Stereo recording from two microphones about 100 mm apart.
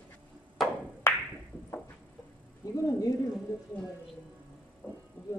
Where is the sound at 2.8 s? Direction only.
35° left (ahead or behind).